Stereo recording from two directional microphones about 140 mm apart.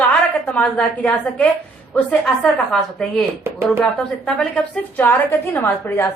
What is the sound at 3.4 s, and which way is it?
Speech, 15° right (ahead or behind).